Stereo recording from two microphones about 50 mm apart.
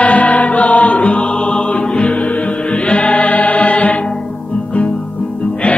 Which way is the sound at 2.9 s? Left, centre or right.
Left.